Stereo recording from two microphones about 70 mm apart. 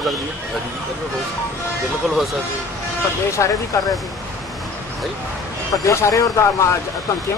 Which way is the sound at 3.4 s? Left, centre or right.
Left.